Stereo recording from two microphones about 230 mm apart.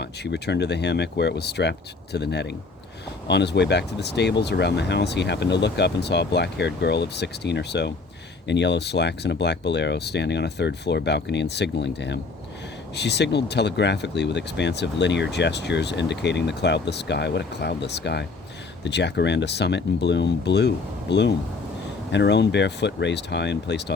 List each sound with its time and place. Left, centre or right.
0.0 s speech: left